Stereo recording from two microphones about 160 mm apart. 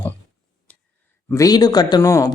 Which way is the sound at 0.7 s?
10° left (ahead or behind).